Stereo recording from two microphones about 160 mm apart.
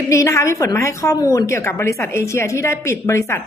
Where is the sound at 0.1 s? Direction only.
20° left (ahead or behind).